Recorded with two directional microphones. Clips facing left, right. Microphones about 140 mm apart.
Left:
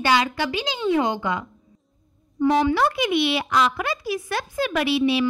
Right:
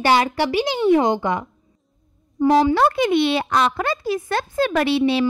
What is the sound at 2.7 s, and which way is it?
A woman's voice, 55° right (ahead or behind).